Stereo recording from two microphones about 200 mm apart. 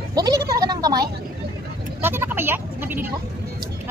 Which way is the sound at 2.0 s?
10° right (ahead or behind).